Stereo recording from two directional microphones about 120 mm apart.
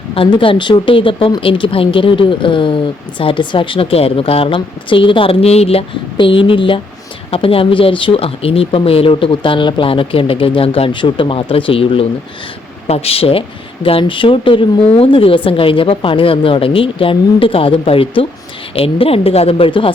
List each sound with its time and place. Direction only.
0.1 s speech: 45° left (ahead or behind)